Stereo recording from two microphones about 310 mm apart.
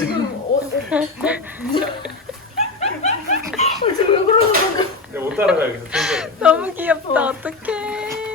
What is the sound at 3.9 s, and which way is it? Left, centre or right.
Chuckle, centre.